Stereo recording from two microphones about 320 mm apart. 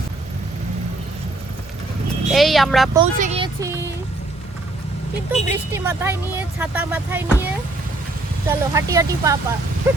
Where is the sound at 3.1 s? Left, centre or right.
Right.